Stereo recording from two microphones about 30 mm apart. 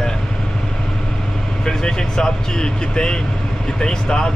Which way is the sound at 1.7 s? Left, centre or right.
Left.